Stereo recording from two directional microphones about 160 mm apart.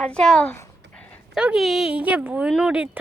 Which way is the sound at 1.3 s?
5° right (ahead or behind).